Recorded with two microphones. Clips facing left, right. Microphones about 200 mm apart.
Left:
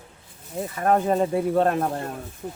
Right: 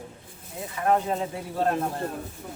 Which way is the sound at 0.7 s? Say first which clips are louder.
Left 3 dB; 50° left (ahead or behind).